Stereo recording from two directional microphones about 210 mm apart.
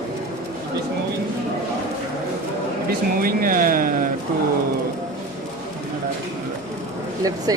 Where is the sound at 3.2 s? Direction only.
40° right (ahead or behind).